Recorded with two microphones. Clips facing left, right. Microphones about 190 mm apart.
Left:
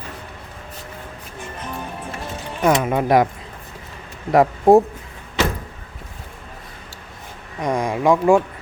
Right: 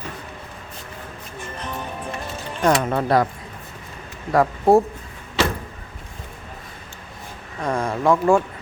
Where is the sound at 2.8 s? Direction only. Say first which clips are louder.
Left 3 dB; 10° left (ahead or behind).